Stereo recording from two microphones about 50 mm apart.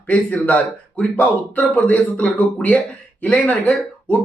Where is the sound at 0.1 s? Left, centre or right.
Left.